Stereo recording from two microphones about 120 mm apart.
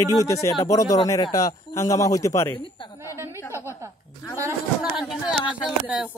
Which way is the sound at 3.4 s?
20° left (ahead or behind).